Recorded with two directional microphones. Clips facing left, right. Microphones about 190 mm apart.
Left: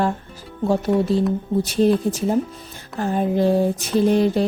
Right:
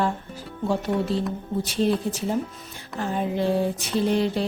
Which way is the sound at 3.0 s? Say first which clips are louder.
Left 6 dB; 45° left (ahead or behind).